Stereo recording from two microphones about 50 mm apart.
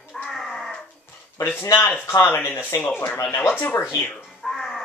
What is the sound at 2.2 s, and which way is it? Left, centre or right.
Speech, left.